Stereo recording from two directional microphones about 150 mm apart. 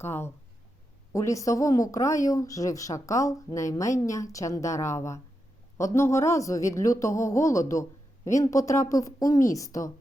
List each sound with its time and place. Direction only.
0.0 s a woman's voice: 15° left (ahead or behind)